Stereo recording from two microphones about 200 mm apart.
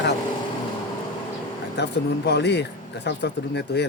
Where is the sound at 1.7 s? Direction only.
60° left (ahead or behind).